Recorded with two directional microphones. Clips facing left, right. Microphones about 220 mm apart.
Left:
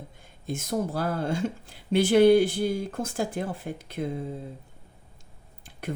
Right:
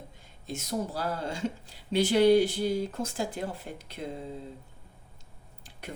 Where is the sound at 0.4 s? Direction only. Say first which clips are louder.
Left 4 dB; 50° left (ahead or behind).